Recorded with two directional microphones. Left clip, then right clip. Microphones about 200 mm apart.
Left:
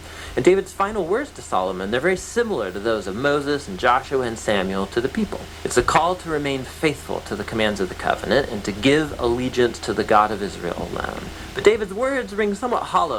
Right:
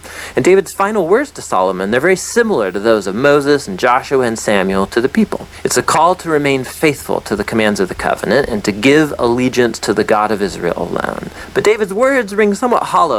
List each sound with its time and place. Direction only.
0.3 s speech: 40° right (ahead or behind)